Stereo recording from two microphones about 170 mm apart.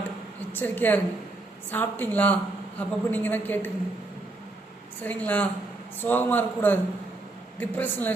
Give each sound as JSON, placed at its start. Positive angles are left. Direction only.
{"t": 0.5, "sound": "speech", "side_deg": 10}
{"t": 5.0, "sound": "speech", "side_deg": 10}